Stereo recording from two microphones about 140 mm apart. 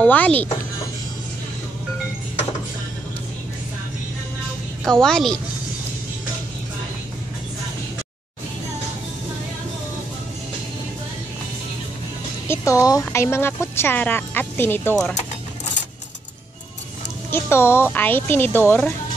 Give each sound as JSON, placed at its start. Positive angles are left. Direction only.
{"t": 0.0, "sound": "speech", "side_deg": 10}
{"t": 4.8, "sound": "a woman's voice", "side_deg": 5}
{"t": 12.4, "sound": "speech", "side_deg": 20}
{"t": 17.3, "sound": "speech", "side_deg": 15}